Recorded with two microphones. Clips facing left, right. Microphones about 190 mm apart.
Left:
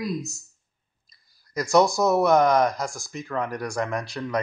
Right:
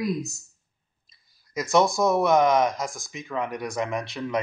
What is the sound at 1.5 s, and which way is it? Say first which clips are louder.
Speech: left 2 dB; centre (ahead or behind).